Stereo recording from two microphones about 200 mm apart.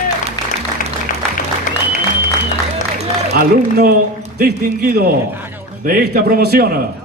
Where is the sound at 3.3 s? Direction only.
55° right (ahead or behind).